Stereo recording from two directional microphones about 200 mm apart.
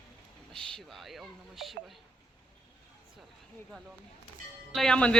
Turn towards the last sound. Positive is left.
turn(degrees=5)  # may be behind; listen again after turning